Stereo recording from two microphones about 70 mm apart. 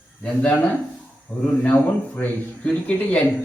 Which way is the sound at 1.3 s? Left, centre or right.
Left.